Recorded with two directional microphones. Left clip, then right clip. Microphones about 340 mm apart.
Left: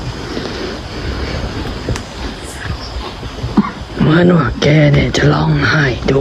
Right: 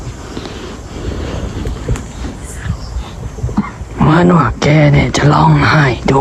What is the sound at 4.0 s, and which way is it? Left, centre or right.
Speech, centre.